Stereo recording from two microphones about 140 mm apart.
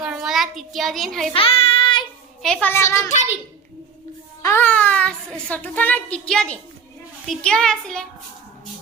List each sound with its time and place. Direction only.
0.0 s a sound: 5° right (ahead or behind)
1.3 s child singing: 40° left (ahead or behind)
2.4 s a child's voice: 5° left (ahead or behind)
4.4 s a child's voice: 15° left (ahead or behind)
7.3 s child singing: 5° left (ahead or behind)